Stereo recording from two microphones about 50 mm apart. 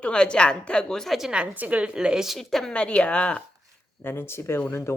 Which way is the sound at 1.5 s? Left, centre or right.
Right.